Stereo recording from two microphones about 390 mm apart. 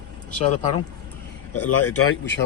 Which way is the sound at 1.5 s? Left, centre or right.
Left.